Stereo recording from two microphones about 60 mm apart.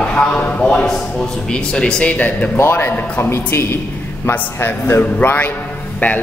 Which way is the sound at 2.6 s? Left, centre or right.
Left.